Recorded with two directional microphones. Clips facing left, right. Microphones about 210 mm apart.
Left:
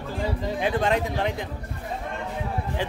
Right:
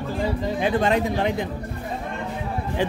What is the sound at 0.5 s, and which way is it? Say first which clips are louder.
Speech: right 2 dB; centre (ahead or behind).